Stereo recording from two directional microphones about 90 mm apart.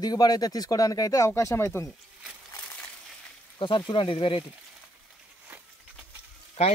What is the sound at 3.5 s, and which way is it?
Speech, 65° left (ahead or behind).